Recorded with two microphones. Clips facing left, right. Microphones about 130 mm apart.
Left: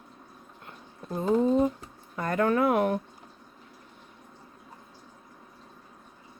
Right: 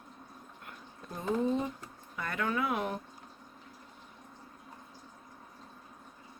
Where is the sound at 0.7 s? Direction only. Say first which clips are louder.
Left 9 dB; 30° left (ahead or behind).